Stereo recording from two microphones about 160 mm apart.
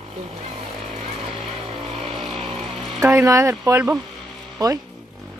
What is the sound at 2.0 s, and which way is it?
Vehicle, 35° right (ahead or behind).